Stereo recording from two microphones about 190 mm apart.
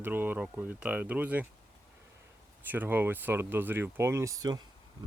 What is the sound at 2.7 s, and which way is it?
Speech, 10° right (ahead or behind).